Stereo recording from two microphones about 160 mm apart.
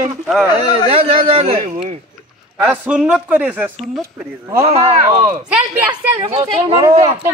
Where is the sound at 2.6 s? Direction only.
10° right (ahead or behind).